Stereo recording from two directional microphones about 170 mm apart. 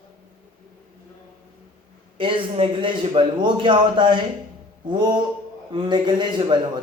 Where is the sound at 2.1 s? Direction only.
30° right (ahead or behind).